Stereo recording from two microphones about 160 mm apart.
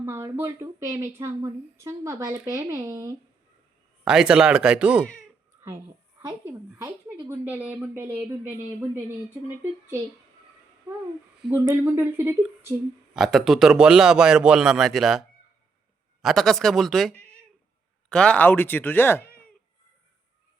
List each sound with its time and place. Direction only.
0.0 s a woman's voice: 15° right (ahead or behind)
4.0 s a man's voice: 5° right (ahead or behind)
6.4 s a woman's voice: 15° right (ahead or behind)
11.5 s a woman's voice: 15° right (ahead or behind)
13.1 s a man's voice: centre (ahead or behind)
16.2 s a man's voice: centre (ahead or behind)